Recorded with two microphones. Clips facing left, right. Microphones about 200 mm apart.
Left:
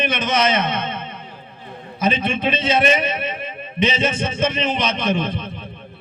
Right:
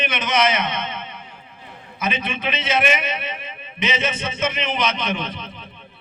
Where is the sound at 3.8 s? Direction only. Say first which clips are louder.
Left 4 dB; 30° left (ahead or behind).